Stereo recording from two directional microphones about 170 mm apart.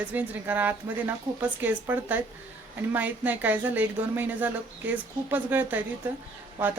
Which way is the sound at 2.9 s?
10° right (ahead or behind).